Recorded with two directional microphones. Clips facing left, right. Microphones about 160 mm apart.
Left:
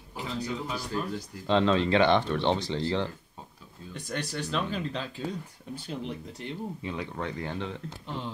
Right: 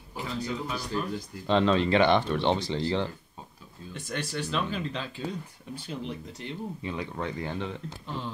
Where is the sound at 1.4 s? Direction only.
5° right (ahead or behind).